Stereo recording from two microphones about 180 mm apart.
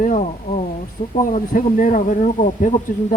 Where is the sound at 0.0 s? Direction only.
40° left (ahead or behind).